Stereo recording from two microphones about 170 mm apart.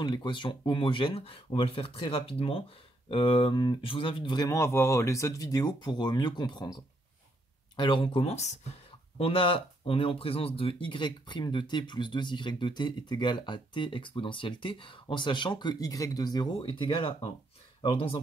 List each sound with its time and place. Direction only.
0.0 s speech: 25° left (ahead or behind)